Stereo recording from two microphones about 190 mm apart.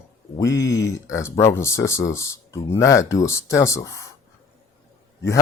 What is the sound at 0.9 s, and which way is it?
Speech, 15° left (ahead or behind).